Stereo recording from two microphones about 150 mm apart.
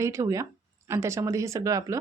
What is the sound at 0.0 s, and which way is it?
Speech, 20° right (ahead or behind).